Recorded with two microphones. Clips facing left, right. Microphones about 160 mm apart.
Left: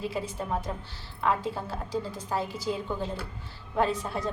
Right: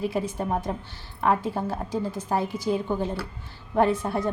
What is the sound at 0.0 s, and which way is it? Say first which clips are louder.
A woman's voice: right 5 dB; 55° right (ahead or behind).